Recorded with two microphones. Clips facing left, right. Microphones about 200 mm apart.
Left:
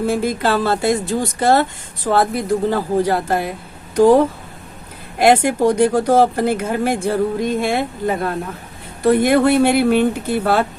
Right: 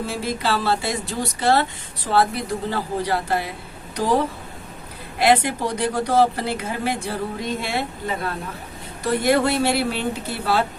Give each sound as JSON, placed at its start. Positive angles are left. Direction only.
{"t": 0.1, "sound": "speech", "side_deg": 50}
{"t": 5.2, "sound": "speech", "side_deg": 45}